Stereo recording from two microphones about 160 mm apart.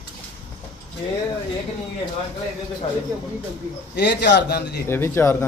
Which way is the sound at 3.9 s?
90° left.